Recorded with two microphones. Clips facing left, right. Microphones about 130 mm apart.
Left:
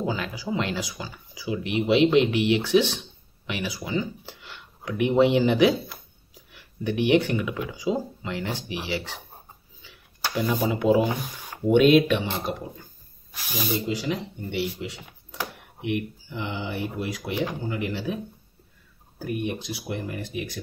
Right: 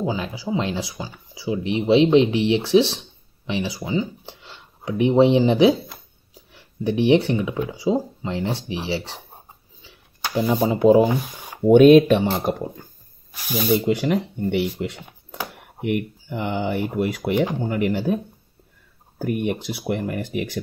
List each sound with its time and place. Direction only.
0.0 s speech: 20° right (ahead or behind)
10.5 s speech: 30° right (ahead or behind); by 12.6 s 50° right (ahead or behind)
13.3 s speech: 5° right (ahead or behind)
13.7 s speech: 60° right (ahead or behind)